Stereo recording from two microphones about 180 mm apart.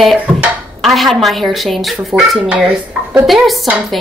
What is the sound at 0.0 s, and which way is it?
Speech, 5° right (ahead or behind).